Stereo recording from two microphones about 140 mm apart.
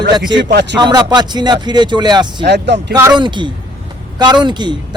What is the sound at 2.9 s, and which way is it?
Speech, 20° right (ahead or behind).